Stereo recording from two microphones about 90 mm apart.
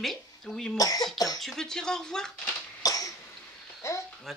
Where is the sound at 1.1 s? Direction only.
45° left (ahead or behind).